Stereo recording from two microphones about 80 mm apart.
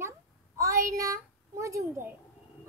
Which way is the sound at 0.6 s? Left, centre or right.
Right.